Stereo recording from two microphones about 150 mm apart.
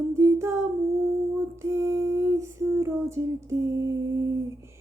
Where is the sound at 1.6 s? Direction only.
20° right (ahead or behind).